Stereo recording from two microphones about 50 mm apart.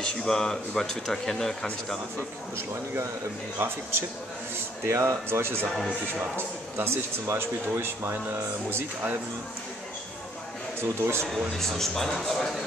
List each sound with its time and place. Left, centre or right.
0.0 s speech: centre
3.5 s speech: right
4.8 s speech: right
8.6 s speech: right
10.8 s speech: right
11.2 s speech: centre